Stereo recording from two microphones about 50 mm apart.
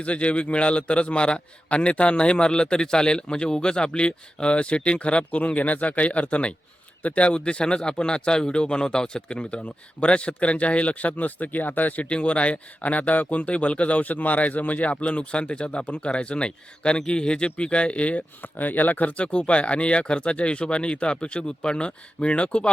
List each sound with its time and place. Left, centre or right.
0.0 s a man's voice: left
12.0 s a man's voice: left